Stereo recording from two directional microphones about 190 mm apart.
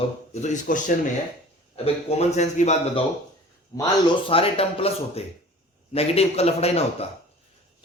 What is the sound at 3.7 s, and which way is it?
Speech, 25° left (ahead or behind).